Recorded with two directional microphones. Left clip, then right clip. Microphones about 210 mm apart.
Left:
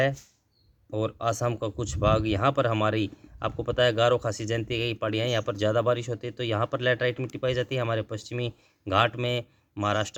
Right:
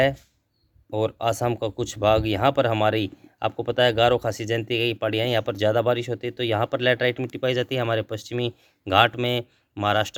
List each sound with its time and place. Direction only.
0.9 s speech: 25° right (ahead or behind)